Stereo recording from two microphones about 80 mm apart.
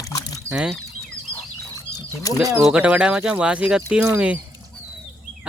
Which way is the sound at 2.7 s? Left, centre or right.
Centre.